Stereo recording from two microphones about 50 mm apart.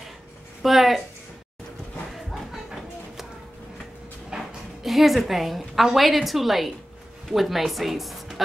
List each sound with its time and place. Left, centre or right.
0.6 s speech: centre
2.1 s a sound: centre
4.4 s a woman's voice: centre